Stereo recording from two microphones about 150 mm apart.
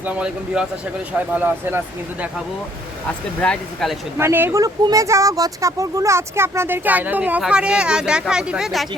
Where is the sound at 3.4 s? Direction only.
5° left (ahead or behind).